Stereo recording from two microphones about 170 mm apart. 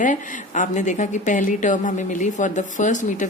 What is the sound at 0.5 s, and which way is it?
Speech, 45° left (ahead or behind).